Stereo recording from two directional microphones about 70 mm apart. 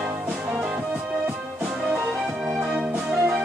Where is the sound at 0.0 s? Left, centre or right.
Centre.